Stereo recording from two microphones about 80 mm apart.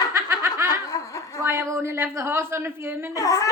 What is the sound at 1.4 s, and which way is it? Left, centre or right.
Speech, right.